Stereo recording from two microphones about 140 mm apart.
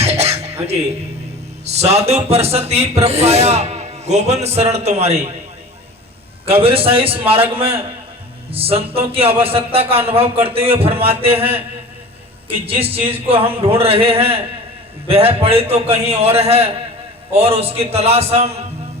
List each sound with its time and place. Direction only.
0.0 s music: 50° right (ahead or behind)
1.6 s a man's voice: 50° right (ahead or behind)
6.5 s a man's voice: 40° right (ahead or behind)
12.5 s a man's voice: 45° right (ahead or behind)